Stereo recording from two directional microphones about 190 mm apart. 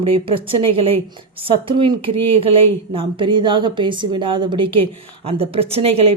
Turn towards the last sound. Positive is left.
turn(degrees=-30)  # may be behind; listen again after turning